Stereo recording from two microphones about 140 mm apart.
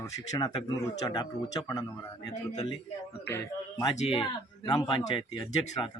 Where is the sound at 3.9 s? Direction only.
45° left (ahead or behind).